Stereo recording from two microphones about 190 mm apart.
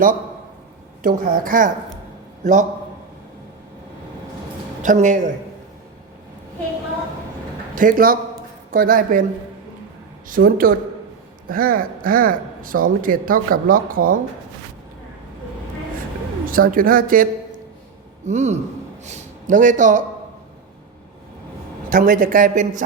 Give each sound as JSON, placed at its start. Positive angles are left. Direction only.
{"t": 1.0, "sound": "a man's voice", "side_deg": -45}
{"t": 4.8, "sound": "a woman's voice", "side_deg": -40}
{"t": 7.8, "sound": "speech", "side_deg": -45}
{"t": 10.2, "sound": "speech", "side_deg": -50}
{"t": 16.5, "sound": "speech", "side_deg": -50}
{"t": 18.3, "sound": "a woman's voice", "side_deg": -40}
{"t": 21.8, "sound": "speech", "side_deg": -45}